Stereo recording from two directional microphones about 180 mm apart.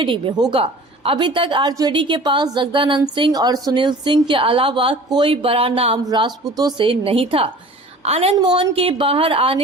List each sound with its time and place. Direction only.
0.0 s a woman's voice: 25° right (ahead or behind)
8.4 s a woman's voice: 25° right (ahead or behind)